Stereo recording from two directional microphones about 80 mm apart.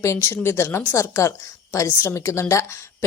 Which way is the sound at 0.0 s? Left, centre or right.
Left.